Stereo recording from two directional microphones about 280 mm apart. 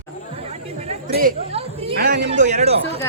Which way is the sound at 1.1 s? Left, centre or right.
Right.